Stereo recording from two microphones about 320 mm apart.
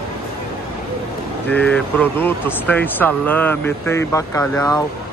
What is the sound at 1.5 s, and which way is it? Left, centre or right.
Speech, centre.